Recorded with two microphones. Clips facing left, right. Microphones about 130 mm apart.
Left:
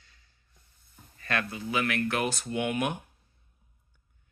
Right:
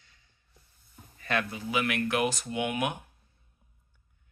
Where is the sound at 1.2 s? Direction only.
15° right (ahead or behind).